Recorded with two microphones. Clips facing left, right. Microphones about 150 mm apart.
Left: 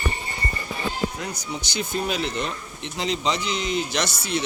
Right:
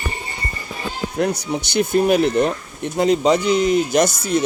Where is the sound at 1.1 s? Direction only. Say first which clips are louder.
Right 11 dB; 65° right (ahead or behind).